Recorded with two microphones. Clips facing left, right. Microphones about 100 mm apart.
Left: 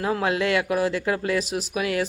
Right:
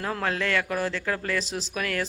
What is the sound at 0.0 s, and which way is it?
Speech, 10° left (ahead or behind).